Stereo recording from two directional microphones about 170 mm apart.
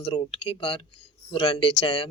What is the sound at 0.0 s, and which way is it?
Speech, 30° left (ahead or behind).